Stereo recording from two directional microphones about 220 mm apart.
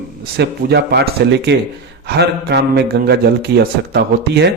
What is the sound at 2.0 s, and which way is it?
A man's voice, 45° right (ahead or behind).